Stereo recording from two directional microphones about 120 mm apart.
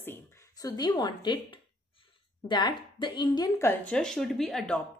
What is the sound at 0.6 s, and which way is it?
Speech, 30° left (ahead or behind).